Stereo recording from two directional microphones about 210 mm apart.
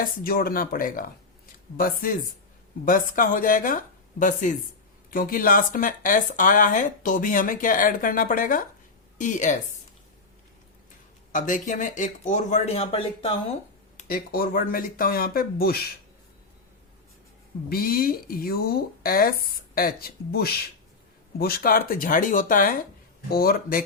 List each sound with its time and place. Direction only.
0.0 s speech: 45° left (ahead or behind)
11.3 s speech: 40° left (ahead or behind)
13.9 s speech: 45° left (ahead or behind)
17.7 s speech: 45° left (ahead or behind)